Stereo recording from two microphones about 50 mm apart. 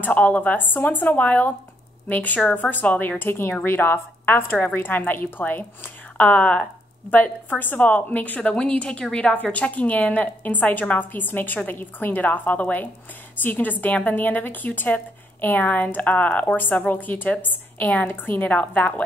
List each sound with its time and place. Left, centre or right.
0.0 s a woman's voice: left